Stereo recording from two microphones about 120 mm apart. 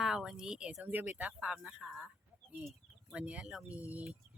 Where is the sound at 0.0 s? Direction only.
5° right (ahead or behind).